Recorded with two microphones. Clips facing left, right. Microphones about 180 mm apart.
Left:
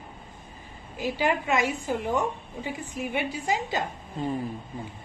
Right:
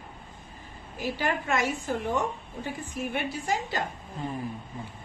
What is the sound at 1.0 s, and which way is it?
A woman's voice, 15° left (ahead or behind).